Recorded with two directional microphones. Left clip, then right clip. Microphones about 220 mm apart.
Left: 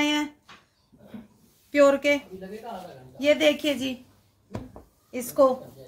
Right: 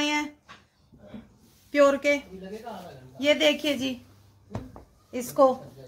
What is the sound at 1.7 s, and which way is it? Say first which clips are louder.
A woman's voice: left 1 dB; 10° left (ahead or behind).